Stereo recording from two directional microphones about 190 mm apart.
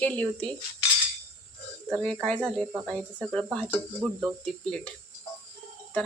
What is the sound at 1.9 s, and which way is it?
Speech, centre (ahead or behind).